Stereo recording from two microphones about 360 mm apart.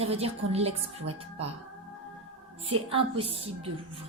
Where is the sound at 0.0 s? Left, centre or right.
Centre.